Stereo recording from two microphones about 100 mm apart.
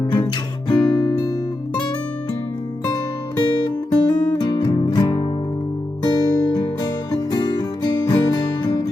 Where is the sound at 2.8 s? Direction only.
40° left (ahead or behind).